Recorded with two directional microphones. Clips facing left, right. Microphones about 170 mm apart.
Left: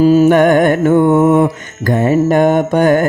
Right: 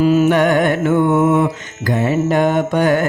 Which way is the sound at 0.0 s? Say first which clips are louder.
Left 5 dB; 40° left (ahead or behind).